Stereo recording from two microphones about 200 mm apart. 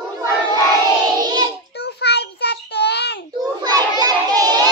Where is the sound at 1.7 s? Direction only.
55° left (ahead or behind).